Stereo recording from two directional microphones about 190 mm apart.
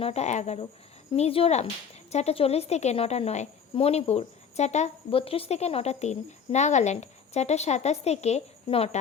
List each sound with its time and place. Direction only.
0.0 s a woman's voice: 35° left (ahead or behind)